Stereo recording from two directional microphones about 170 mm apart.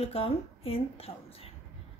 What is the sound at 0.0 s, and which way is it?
A woman's voice, 35° left (ahead or behind).